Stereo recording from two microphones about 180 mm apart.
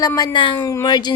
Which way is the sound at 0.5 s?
15° left (ahead or behind).